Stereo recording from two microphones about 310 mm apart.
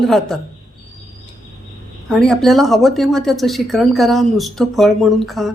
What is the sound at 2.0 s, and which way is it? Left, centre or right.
Speech, centre.